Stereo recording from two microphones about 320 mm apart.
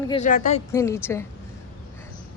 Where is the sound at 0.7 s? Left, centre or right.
Centre.